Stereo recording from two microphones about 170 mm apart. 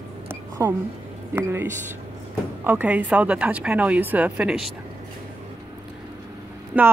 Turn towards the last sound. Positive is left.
turn(degrees=-10)  # may be behind; listen again after turning